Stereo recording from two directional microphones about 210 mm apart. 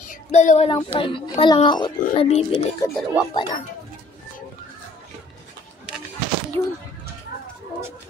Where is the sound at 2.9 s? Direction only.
Centre (ahead or behind).